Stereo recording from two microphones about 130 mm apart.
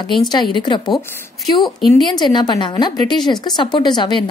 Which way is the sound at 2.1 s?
35° left (ahead or behind).